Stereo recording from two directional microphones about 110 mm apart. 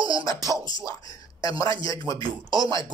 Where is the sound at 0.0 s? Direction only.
35° left (ahead or behind).